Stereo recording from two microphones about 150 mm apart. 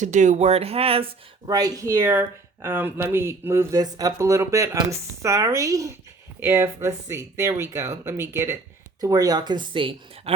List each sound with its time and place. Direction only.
0.0 s speech: 55° right (ahead or behind)
1.5 s speech: 25° right (ahead or behind)